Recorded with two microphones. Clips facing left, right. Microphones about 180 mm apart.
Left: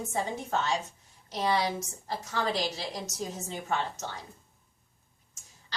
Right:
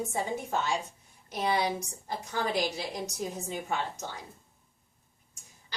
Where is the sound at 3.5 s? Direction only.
10° right (ahead or behind).